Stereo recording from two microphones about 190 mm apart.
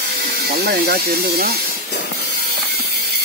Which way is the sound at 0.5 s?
55° right (ahead or behind).